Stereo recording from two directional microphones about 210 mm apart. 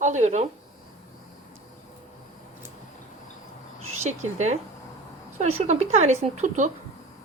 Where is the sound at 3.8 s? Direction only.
30° right (ahead or behind).